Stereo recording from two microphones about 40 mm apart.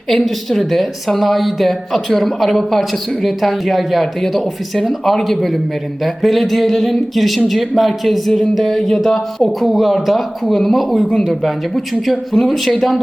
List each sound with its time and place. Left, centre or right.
0.1 s a woman's voice: centre